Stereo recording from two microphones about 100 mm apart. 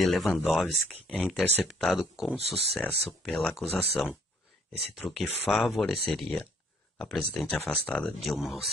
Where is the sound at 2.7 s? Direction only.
20° left (ahead or behind).